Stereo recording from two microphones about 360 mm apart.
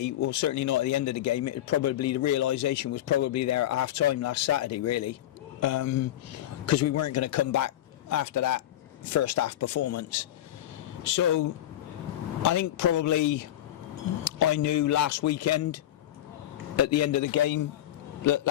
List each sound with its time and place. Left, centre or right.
0.0 s speech: left